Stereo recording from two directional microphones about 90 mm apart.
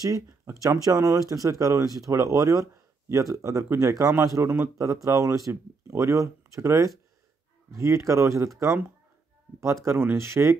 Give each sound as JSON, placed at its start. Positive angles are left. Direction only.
{"t": 0.0, "sound": "speech", "side_deg": -40}
{"t": 9.8, "sound": "speech", "side_deg": -30}